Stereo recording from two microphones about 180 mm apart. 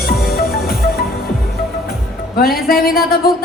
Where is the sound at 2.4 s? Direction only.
55° left (ahead or behind).